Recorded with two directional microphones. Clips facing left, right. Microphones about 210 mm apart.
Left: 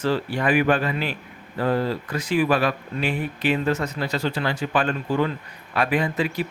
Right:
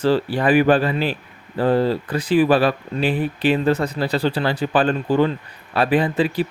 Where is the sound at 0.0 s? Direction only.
35° right (ahead or behind).